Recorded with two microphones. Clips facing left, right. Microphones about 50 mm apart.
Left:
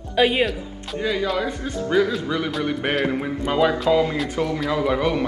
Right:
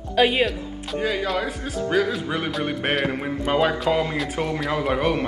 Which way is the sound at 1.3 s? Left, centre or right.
Centre.